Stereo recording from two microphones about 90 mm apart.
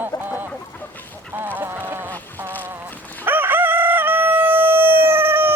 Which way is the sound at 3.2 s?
20° right (ahead or behind).